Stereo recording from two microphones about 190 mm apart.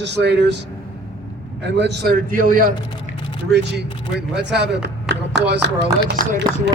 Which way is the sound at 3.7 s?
65° right (ahead or behind).